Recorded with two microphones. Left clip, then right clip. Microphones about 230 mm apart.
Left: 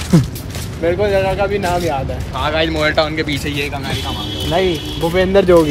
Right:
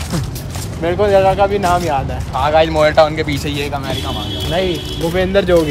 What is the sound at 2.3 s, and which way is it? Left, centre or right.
Speech, right.